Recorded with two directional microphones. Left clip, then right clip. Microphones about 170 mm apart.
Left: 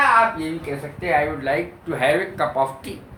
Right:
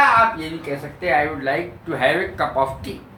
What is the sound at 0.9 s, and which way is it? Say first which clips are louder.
Speech: right 1 dB; 20° left (ahead or behind).